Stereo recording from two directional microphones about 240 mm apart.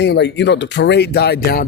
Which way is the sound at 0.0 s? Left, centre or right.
Left.